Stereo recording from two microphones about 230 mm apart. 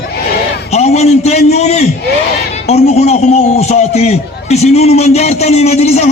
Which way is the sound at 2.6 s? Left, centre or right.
Left.